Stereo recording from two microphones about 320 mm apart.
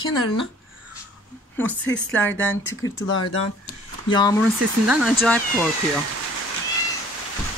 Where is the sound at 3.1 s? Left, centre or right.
Left.